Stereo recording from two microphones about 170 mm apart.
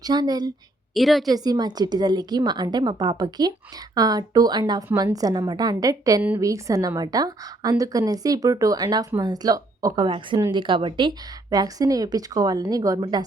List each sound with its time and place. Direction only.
0.0 s a woman's voice: 25° right (ahead or behind)
0.9 s a woman's voice: centre (ahead or behind)
1.3 s a woman's voice: 25° right (ahead or behind)